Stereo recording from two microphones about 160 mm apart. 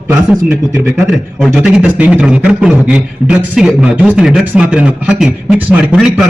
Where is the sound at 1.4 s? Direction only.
5° right (ahead or behind).